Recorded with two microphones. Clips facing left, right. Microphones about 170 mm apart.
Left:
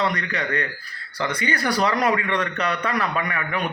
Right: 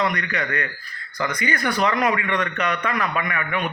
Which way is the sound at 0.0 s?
30° left (ahead or behind).